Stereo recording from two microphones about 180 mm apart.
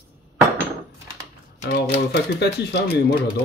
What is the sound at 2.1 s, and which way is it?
Speech, 70° left (ahead or behind).